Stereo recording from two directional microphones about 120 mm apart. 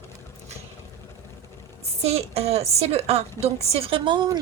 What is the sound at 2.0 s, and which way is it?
A woman's voice, 55° right (ahead or behind).